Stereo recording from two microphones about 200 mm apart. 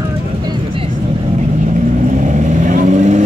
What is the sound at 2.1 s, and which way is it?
Vehicle, 40° right (ahead or behind).